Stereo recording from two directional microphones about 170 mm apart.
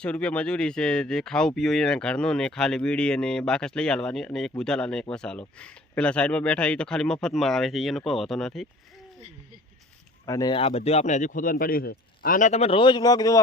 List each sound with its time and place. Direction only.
0.0 s speech: 5° left (ahead or behind)
10.2 s speech: 20° left (ahead or behind)
10.5 s a man's voice: 35° left (ahead or behind)